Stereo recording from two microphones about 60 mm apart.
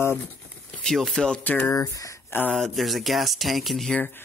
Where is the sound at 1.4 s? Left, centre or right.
Left.